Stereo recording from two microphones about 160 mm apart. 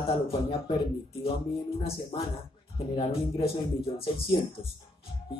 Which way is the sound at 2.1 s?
30° left (ahead or behind).